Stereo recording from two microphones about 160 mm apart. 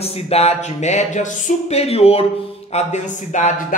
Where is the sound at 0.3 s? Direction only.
40° left (ahead or behind).